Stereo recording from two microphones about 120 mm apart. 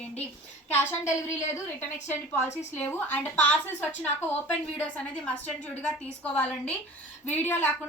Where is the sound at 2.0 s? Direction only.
20° left (ahead or behind).